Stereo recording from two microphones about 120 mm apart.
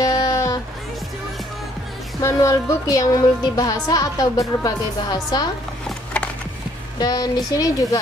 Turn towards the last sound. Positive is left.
turn(degrees=30)  # may be behind; listen again after turning